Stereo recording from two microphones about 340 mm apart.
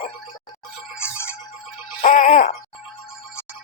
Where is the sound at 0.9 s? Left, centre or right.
Centre.